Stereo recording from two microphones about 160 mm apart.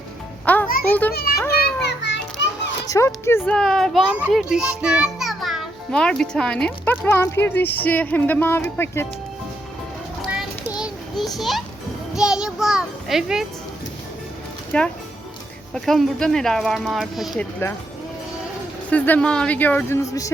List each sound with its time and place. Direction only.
0.4 s music: 10° left (ahead or behind)
1.1 s a child's voice: 75° left (ahead or behind)
1.5 s children playing: 90° left
2.8 s a child's voice: 20° left (ahead or behind)
3.5 s a child's voice: 5° left (ahead or behind)
10.8 s a sound: centre (ahead or behind)
11.3 s speech: centre (ahead or behind)
14.7 s a child's voice: 5° left (ahead or behind)
17.6 s a child's voice: 15° left (ahead or behind)
18.9 s a child's voice: 10° left (ahead or behind)